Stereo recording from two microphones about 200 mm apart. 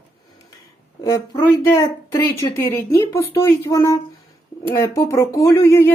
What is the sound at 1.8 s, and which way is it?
Speech, 15° left (ahead or behind).